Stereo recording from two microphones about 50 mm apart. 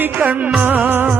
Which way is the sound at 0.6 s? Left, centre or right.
Right.